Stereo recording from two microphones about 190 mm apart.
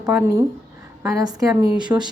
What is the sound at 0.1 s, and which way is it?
A woman's voice, 10° right (ahead or behind).